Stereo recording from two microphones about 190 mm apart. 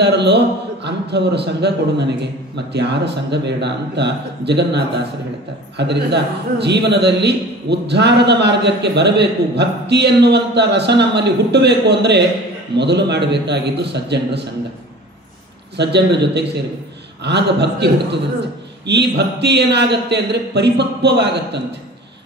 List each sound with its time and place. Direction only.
0.0 s a sound: 65° right (ahead or behind)
0.8 s a man's voice: 65° right (ahead or behind)
15.7 s a man's voice: 65° right (ahead or behind)